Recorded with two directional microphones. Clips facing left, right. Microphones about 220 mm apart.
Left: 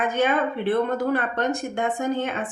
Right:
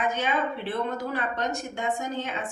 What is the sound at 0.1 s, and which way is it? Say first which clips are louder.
A woman's voice: left 6 dB; 55° left (ahead or behind).